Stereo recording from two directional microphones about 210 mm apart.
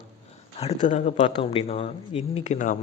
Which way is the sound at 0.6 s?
35° left (ahead or behind).